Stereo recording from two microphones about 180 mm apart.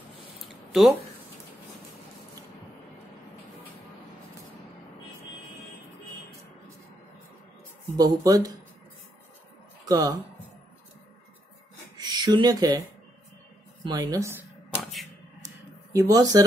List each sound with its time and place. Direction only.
0.5 s a sound: centre (ahead or behind)
8.0 s speech: 20° right (ahead or behind)
9.8 s speech: 20° right (ahead or behind)
12.0 s speech: 25° right (ahead or behind)
13.9 s speech: 20° right (ahead or behind)
15.4 s a sound: 20° right (ahead or behind)